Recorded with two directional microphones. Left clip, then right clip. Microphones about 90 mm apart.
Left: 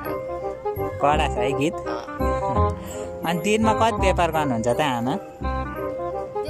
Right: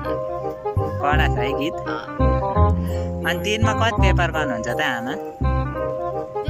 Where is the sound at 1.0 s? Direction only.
40° left (ahead or behind).